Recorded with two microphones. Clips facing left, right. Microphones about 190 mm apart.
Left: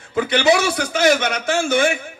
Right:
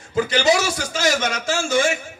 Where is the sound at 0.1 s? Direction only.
60° left (ahead or behind).